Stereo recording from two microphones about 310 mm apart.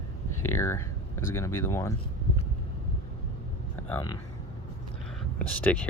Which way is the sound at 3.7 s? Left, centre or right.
Centre.